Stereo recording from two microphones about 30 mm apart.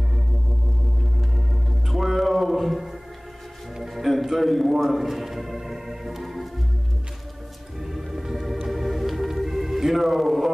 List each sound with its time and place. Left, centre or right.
1.3 s music: centre
4.1 s a man's voice: centre
7.8 s music: centre
8.5 s organ: centre